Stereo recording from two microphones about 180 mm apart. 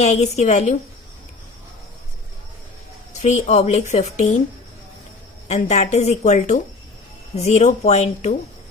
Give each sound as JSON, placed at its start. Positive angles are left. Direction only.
{"t": 0.0, "sound": "a woman's voice", "side_deg": 35}
{"t": 3.1, "sound": "a woman's voice", "side_deg": 40}
{"t": 5.5, "sound": "a woman's voice", "side_deg": 40}